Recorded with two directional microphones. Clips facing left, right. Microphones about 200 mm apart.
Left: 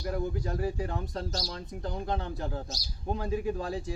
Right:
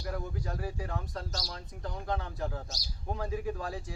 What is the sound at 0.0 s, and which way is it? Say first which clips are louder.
Speech: left 5 dB; 25° left (ahead or behind).